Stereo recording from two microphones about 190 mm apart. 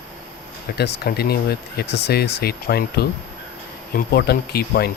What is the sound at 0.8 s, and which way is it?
Speech, 60° left (ahead or behind).